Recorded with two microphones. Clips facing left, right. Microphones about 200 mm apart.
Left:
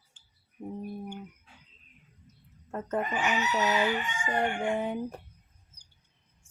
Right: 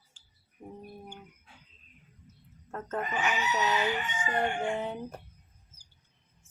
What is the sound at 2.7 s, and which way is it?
A woman's voice, 15° left (ahead or behind).